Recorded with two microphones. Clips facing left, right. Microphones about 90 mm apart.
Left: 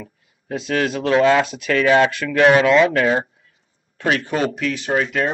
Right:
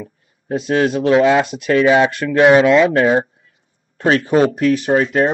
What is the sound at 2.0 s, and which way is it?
Speech, 30° right (ahead or behind).